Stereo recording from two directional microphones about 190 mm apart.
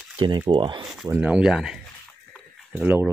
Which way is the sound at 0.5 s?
25° right (ahead or behind).